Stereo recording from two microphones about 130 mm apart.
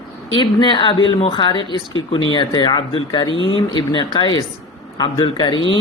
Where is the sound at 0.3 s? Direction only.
35° left (ahead or behind).